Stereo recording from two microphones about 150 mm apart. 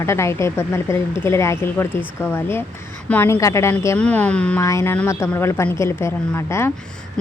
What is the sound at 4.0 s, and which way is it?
Speech, 10° left (ahead or behind).